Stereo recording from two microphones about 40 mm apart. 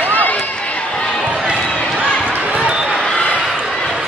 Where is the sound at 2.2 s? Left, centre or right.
Right.